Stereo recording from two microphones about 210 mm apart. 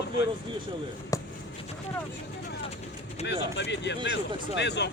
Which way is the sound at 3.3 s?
55° left (ahead or behind).